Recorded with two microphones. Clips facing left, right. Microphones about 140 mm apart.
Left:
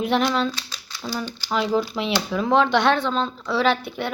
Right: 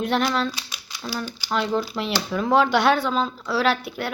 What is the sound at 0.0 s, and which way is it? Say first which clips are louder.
Speech: left 1 dB; centre (ahead or behind).